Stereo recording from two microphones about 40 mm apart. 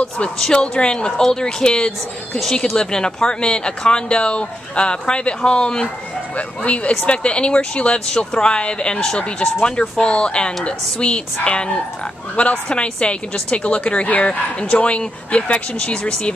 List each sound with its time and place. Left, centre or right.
0.4 s speech: left
6.3 s speech: left